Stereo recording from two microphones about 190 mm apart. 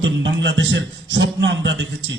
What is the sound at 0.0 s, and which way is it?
A man's voice, 70° right (ahead or behind).